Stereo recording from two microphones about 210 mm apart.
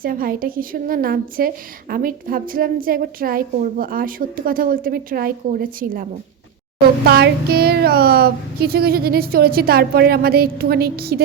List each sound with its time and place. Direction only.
0.0 s a woman's voice: 45° right (ahead or behind)
7.1 s a woman's voice: 50° right (ahead or behind)